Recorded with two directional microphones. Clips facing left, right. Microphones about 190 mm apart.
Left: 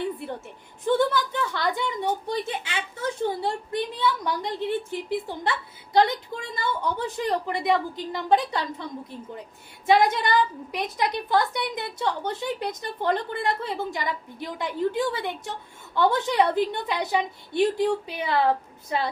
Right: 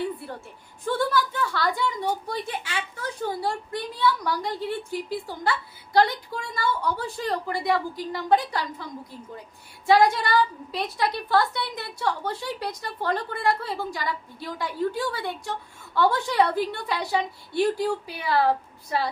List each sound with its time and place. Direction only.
0.9 s speech: 20° left (ahead or behind)